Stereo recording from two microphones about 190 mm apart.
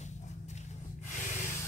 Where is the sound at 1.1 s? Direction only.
40° left (ahead or behind).